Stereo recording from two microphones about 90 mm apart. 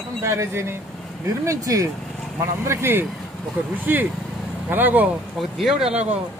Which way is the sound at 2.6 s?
25° right (ahead or behind).